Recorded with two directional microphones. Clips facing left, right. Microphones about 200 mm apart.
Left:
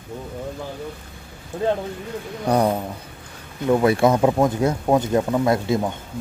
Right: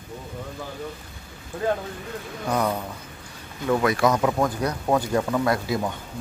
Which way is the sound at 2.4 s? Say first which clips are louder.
Left 5 dB; 35° left (ahead or behind).